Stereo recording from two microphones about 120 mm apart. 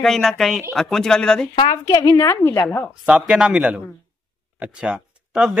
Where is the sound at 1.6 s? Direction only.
35° left (ahead or behind).